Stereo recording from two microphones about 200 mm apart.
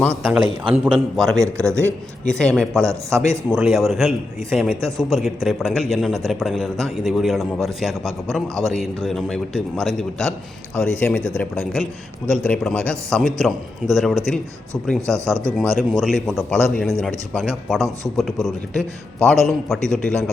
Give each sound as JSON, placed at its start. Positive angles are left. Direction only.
{"t": 0.0, "sound": "a man's voice", "side_deg": 0}
{"t": 2.7, "sound": "speech", "side_deg": -15}
{"t": 3.5, "sound": "a man's voice", "side_deg": 0}
{"t": 4.8, "sound": "speech", "side_deg": -15}
{"t": 5.0, "sound": "a man's voice", "side_deg": 0}
{"t": 15.0, "sound": "speech", "side_deg": -15}
{"t": 15.5, "sound": "a man's voice", "side_deg": 0}